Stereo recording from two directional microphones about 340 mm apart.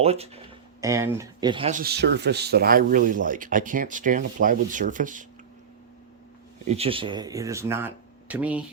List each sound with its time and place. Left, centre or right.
0.0 s speech: centre
6.7 s speech: centre